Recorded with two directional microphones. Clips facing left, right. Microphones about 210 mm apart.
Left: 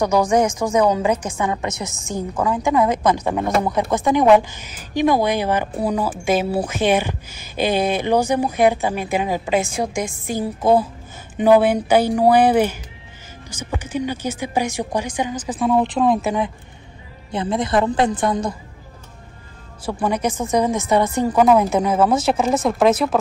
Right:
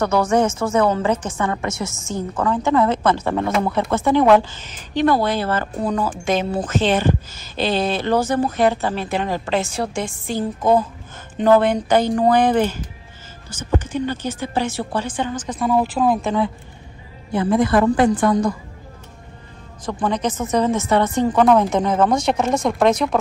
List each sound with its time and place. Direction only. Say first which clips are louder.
0.0 s a woman's voice: left 1 dB; 15° left (ahead or behind); by 16.3 s 5° right (ahead or behind)
16.3 s a woman's voice: right 1 dB; 15° left (ahead or behind)
19.8 s a woman's voice: left 1 dB; 10° left (ahead or behind)